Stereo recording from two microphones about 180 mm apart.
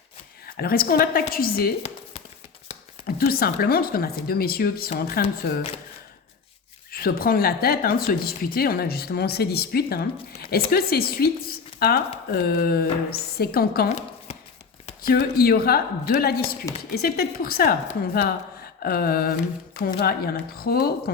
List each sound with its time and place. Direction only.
0.4 s a woman's voice: 55° left (ahead or behind)
3.1 s a woman's voice: 55° left (ahead or behind)
6.9 s a woman's voice: 55° left (ahead or behind)
15.0 s a woman's voice: 60° left (ahead or behind)